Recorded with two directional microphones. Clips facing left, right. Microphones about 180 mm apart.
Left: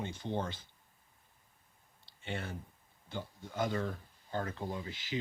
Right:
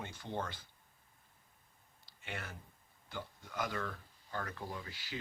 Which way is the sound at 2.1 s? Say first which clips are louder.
Left 6 dB; 25° left (ahead or behind).